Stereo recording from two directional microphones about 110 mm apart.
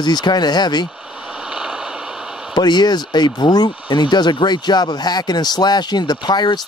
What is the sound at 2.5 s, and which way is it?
Speech, 40° left (ahead or behind).